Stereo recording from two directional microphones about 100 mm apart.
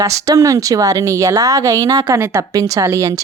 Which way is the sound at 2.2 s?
25° right (ahead or behind).